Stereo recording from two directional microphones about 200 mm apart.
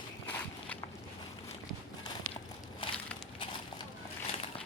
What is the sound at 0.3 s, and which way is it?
Walk, 10° left (ahead or behind).